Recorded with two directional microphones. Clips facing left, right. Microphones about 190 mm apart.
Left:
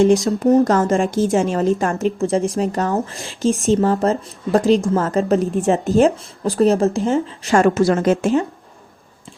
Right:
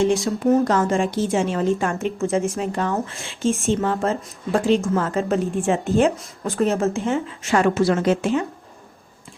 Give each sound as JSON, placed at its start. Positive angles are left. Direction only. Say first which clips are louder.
{"t": 0.1, "sound": "a woman's voice", "louder": "left 4 dB", "side_deg": 40}